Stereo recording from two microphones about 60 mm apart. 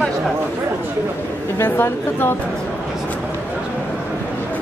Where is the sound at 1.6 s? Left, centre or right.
Left.